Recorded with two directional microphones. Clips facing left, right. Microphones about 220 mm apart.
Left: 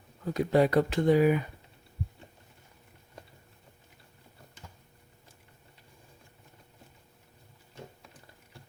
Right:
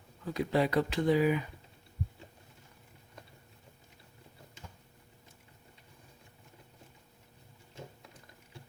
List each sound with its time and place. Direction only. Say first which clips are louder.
0.3 s speech: left 5 dB; 45° left (ahead or behind)